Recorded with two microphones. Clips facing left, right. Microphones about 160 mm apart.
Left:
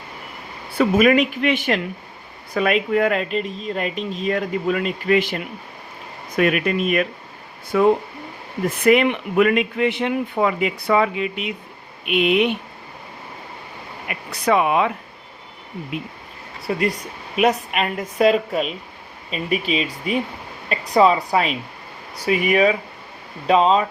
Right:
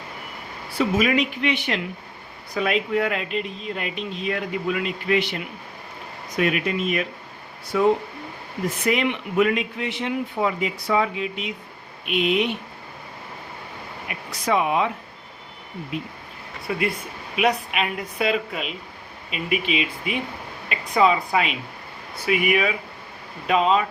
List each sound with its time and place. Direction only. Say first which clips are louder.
0.8 s speech: left 5 dB; 55° left (ahead or behind)
14.1 s speech: left 4 dB; 65° left (ahead or behind)
16.7 s speech: left 3 dB; 35° left (ahead or behind)